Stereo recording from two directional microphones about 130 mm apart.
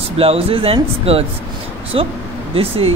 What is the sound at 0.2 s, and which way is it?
Speech, 45° right (ahead or behind).